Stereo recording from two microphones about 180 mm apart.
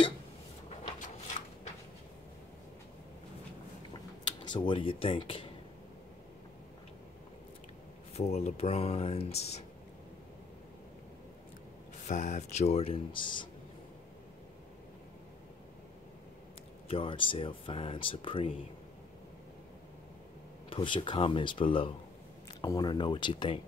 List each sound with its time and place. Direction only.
4.5 s speech: 25° left (ahead or behind)
8.1 s speech: 35° left (ahead or behind)
12.1 s speech: 40° left (ahead or behind)
16.8 s speech: 30° left (ahead or behind)
20.7 s speech: 25° left (ahead or behind)